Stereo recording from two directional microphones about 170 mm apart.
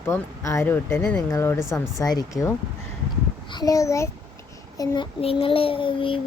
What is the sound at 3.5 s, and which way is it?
Child singing, 20° left (ahead or behind).